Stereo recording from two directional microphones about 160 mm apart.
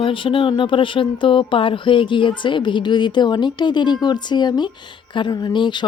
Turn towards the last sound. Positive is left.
turn(degrees=30)  # may be behind; listen again after turning